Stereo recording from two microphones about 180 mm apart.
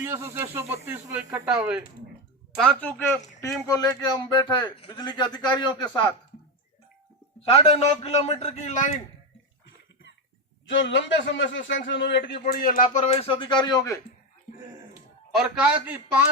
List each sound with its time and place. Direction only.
0.0 s speech: 15° right (ahead or behind)
2.6 s speech: 5° left (ahead or behind)
3.7 s a man's voice: 20° left (ahead or behind)
7.4 s a man's voice: 35° left (ahead or behind)
10.7 s a man's voice: 85° left
12.2 s a man's voice: 55° left (ahead or behind); by 14.0 s 20° left (ahead or behind)
15.3 s speech: 5° right (ahead or behind)